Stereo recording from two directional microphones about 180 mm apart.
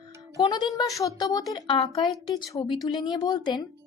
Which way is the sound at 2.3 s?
20° left (ahead or behind).